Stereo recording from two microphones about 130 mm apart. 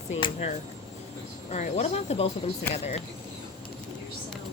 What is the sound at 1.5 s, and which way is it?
Speech, 60° left (ahead or behind).